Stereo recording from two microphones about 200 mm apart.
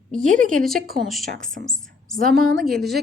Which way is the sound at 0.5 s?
Centre (ahead or behind).